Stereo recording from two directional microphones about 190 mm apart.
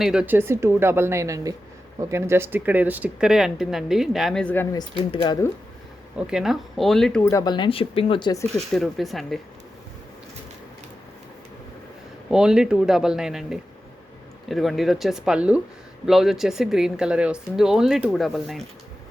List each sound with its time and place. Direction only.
0.0 s speech: 5° right (ahead or behind); by 5.5 s 25° left (ahead or behind)
6.1 s speech: 5° right (ahead or behind)
7.3 s speech: 20° left (ahead or behind)
8.5 s speech: centre (ahead or behind)
12.3 s speech: 5° right (ahead or behind)